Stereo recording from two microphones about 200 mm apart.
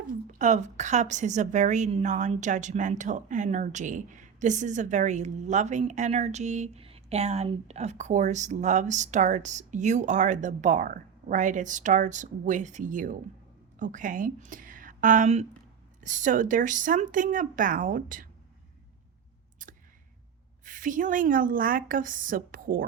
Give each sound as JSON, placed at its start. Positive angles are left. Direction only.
{"t": 0.3, "sound": "a woman's voice", "side_deg": -40}
{"t": 19.6, "sound": "clicking", "side_deg": -40}
{"t": 20.7, "sound": "a woman's voice", "side_deg": -40}